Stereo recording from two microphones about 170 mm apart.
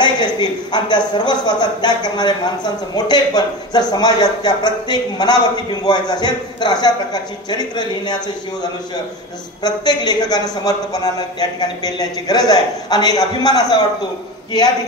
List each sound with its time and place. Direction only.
0.0 s a man's voice: 25° left (ahead or behind)
9.6 s a man's voice: 25° left (ahead or behind)